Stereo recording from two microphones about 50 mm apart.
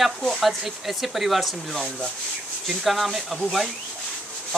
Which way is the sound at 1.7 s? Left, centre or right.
Centre.